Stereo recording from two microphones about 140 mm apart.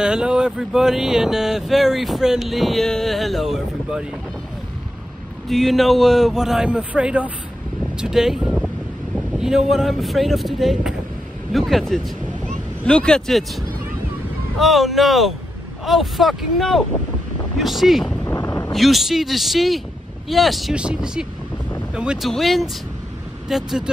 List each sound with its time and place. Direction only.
0.0 s speech: 5° right (ahead or behind)
5.5 s speech: centre (ahead or behind)
18.2 s vehicle: 20° left (ahead or behind)
18.7 s speech: centre (ahead or behind)